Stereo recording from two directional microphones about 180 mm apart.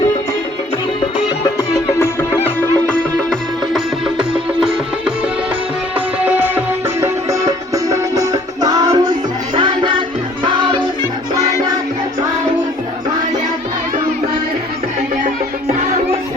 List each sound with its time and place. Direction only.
2.0 s music: 10° left (ahead or behind); by 5.1 s 5° right (ahead or behind)
6.2 s music: 10° right (ahead or behind)